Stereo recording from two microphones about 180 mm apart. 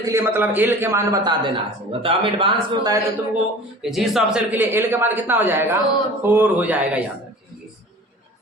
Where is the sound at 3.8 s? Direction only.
Centre (ahead or behind).